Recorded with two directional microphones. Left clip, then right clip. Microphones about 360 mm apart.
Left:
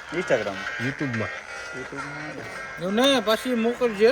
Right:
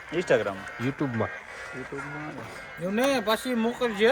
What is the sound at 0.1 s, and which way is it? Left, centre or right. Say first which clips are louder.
Speech: left 1 dB; right.